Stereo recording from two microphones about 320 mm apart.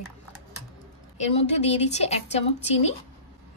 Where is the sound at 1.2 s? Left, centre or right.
Centre.